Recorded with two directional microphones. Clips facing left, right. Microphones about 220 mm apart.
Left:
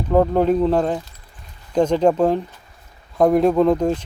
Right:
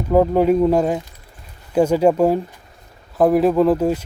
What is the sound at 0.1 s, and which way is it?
Speech, 10° right (ahead or behind).